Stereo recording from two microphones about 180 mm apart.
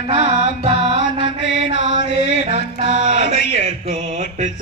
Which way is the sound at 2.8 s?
75° left (ahead or behind).